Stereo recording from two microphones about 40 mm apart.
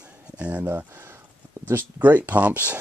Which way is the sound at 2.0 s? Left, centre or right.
Right.